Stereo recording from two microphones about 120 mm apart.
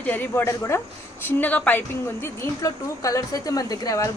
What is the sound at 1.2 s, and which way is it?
A woman's voice, 15° left (ahead or behind).